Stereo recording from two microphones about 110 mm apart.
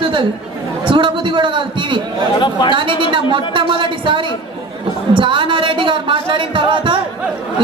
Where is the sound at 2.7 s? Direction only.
50° right (ahead or behind).